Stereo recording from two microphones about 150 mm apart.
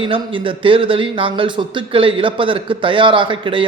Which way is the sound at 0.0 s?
35° right (ahead or behind).